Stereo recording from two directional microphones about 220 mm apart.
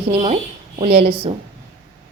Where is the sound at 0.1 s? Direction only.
35° right (ahead or behind).